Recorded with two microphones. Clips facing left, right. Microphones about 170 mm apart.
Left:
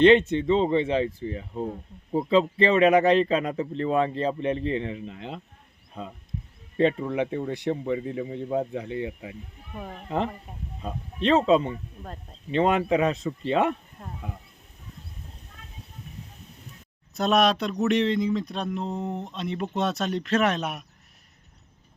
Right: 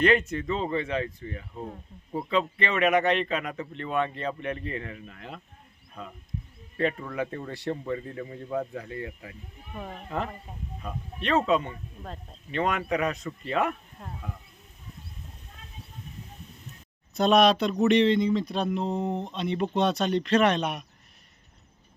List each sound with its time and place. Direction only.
0.0 s a man's voice: 25° left (ahead or behind)
9.7 s speech: centre (ahead or behind)
10.8 s speech: 30° left (ahead or behind)
12.0 s speech: 5° left (ahead or behind)
12.5 s speech: 30° left (ahead or behind)
14.0 s speech: centre (ahead or behind)
17.2 s speech: centre (ahead or behind)